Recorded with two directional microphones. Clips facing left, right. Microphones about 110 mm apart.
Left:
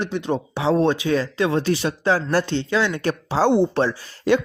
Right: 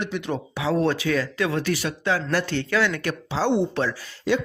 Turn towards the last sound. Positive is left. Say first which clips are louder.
# left 4 dB
turn(degrees=55)  # may be behind; listen again after turning